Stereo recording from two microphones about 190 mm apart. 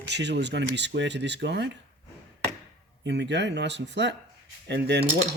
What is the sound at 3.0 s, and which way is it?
Speech, 65° right (ahead or behind).